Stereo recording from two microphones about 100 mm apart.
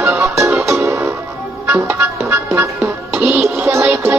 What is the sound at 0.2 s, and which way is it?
Music, 30° right (ahead or behind).